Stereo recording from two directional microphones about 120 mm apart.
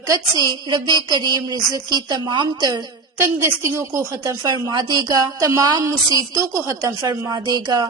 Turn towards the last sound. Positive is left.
turn(degrees=-35)  # may be behind; listen again after turning